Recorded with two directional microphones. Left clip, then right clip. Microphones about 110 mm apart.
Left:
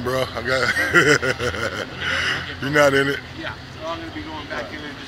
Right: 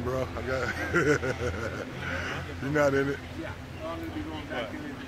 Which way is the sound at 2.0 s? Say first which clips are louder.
Left 13 dB; 15° left (ahead or behind).